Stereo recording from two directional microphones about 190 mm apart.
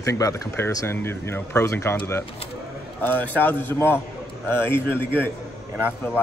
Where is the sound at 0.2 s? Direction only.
15° left (ahead or behind).